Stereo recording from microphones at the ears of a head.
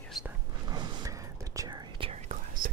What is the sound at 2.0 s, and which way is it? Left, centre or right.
Whispering, right.